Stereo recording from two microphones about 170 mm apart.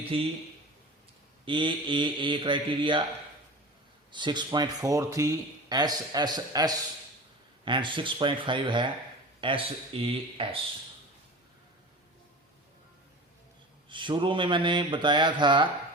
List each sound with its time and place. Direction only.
0.1 s speech: 35° right (ahead or behind)
1.5 s speech: 30° right (ahead or behind)
4.1 s speech: 25° right (ahead or behind)
13.9 s speech: 30° right (ahead or behind)